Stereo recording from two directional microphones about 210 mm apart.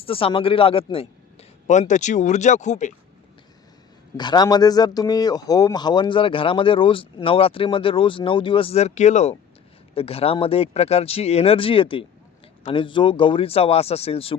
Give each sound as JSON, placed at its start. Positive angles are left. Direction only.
{"t": 0.0, "sound": "a man's voice", "side_deg": 25}
{"t": 4.2, "sound": "speech", "side_deg": 20}